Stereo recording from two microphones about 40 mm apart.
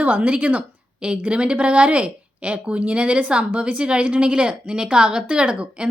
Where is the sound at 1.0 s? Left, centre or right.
Right.